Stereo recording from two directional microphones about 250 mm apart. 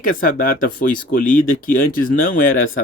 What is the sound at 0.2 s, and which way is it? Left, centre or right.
Speech, left.